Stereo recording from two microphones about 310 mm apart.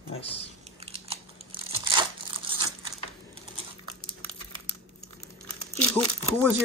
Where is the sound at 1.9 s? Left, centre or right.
Centre.